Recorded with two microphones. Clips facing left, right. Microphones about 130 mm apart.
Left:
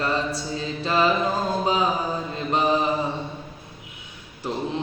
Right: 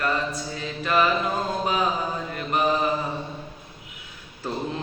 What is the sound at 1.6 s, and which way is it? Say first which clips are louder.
Mantra: left 2 dB; 25° left (ahead or behind).